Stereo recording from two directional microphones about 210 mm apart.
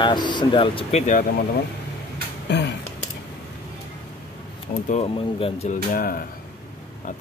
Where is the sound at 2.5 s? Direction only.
55° left (ahead or behind).